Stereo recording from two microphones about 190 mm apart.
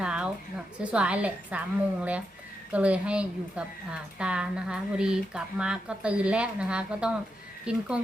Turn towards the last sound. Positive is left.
turn(degrees=-5)  # may be behind; listen again after turning